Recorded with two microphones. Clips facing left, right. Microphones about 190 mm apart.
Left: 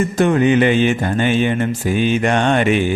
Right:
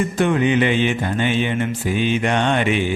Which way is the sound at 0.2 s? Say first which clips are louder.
Left 4 dB; 45° left (ahead or behind).